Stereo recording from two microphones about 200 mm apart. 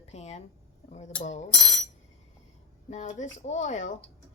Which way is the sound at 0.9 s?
35° left (ahead or behind).